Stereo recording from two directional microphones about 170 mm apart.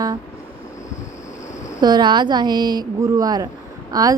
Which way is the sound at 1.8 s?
25° right (ahead or behind).